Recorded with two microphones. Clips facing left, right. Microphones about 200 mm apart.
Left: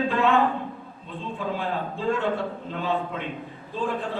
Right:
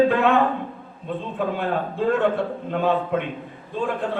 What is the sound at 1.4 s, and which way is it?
Speech, 60° right (ahead or behind).